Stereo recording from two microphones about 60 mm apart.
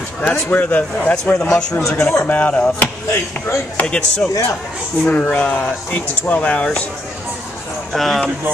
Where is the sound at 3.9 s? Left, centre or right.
Centre.